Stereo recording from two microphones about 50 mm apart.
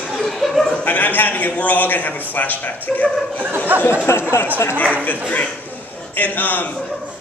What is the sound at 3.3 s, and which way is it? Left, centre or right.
Speech, right.